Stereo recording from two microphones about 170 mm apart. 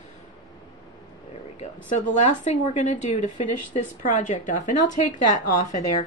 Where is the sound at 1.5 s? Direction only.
45° left (ahead or behind).